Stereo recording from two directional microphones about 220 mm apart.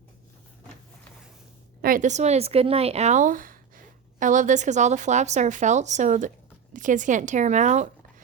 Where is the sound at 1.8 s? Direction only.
35° right (ahead or behind).